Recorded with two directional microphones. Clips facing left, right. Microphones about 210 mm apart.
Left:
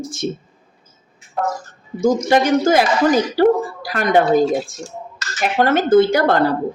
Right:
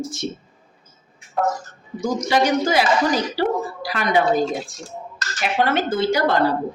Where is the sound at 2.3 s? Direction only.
50° left (ahead or behind).